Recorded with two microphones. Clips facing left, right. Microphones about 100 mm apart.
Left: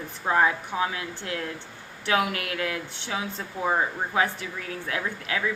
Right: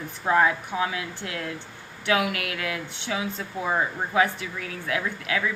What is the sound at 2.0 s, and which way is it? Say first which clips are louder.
Speech: right 1 dB; 35° left (ahead or behind).